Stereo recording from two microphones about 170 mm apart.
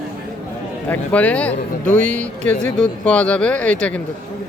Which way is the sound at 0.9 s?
10° left (ahead or behind).